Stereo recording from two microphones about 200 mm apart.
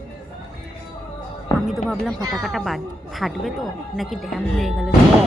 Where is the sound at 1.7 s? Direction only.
Centre (ahead or behind).